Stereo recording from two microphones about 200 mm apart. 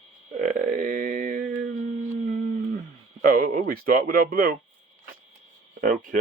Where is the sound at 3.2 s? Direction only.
45° right (ahead or behind).